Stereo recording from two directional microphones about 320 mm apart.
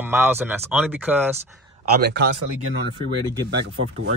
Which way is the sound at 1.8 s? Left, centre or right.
Right.